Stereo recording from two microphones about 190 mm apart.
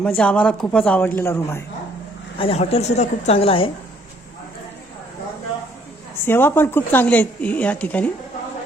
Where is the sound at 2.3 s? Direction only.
30° left (ahead or behind).